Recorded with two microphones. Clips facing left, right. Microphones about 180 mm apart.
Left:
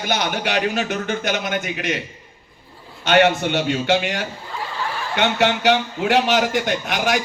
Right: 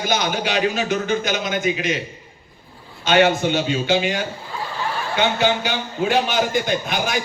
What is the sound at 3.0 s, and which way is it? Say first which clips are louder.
A man's voice: even; 65° left (ahead or behind).